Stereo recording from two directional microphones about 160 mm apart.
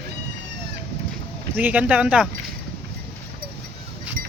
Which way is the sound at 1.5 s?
10° right (ahead or behind).